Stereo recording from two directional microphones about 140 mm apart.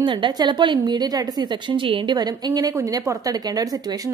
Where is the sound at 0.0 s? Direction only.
35° right (ahead or behind).